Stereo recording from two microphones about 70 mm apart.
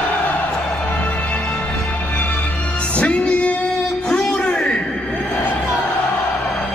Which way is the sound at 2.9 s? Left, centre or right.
Centre.